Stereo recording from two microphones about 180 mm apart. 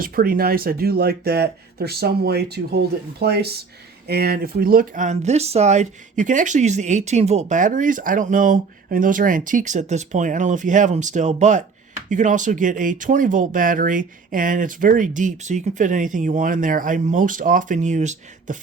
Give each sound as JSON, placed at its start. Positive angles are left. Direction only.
{"t": 0.0, "sound": "speech", "side_deg": -55}